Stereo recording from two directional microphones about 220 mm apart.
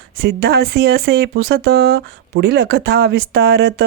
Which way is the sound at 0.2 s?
45° right (ahead or behind).